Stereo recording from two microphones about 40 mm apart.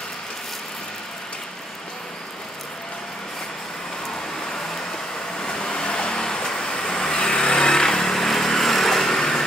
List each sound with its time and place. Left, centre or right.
5.4 s a sound: centre
5.7 s vehicle: left
6.2 s vehicle: centre